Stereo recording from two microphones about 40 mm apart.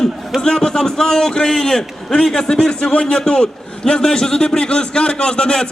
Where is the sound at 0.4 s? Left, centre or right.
Centre.